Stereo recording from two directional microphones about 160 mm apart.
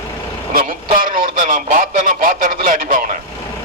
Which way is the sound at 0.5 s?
60° right (ahead or behind).